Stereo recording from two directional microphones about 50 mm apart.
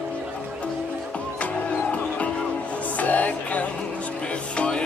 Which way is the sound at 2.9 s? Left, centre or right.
Left.